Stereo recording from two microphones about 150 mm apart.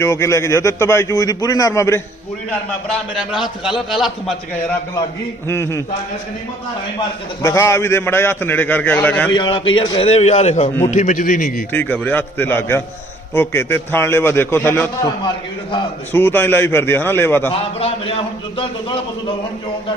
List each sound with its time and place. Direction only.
0.0 s a man's voice: 20° left (ahead or behind)
3.3 s a man's voice: 5° right (ahead or behind)
5.5 s a man's voice: 20° left (ahead or behind)
7.4 s a man's voice: 20° left (ahead or behind)
9.3 s a man's voice: 30° left (ahead or behind)
10.1 s a man's voice: 45° left (ahead or behind)
11.7 s a man's voice: 10° left (ahead or behind)
16.1 s a man's voice: 15° left (ahead or behind)
17.5 s a man's voice: 40° left (ahead or behind)